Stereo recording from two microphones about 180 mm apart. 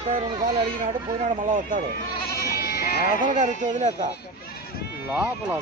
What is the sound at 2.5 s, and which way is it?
Sheep, 60° left (ahead or behind).